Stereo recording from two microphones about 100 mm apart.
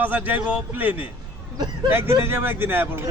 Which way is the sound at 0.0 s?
15° right (ahead or behind).